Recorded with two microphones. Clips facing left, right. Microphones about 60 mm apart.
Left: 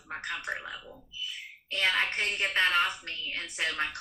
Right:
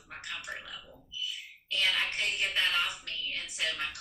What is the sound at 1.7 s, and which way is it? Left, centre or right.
A woman's voice, left.